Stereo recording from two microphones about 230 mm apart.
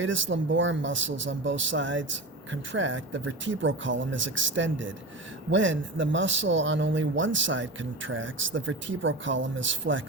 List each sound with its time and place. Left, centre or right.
0.0 s speech: right